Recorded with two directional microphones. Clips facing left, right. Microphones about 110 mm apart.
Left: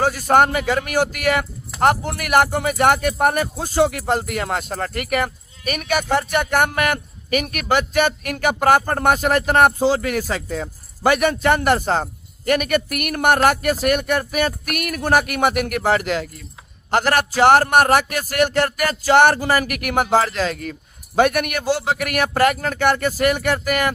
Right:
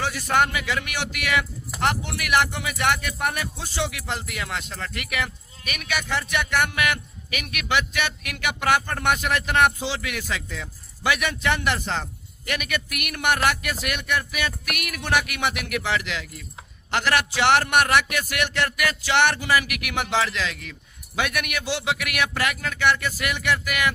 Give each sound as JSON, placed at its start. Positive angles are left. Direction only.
{"t": 0.0, "sound": "speech", "side_deg": 45}